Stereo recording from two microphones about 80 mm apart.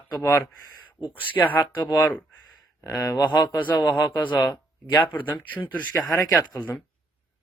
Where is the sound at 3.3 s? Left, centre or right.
Left.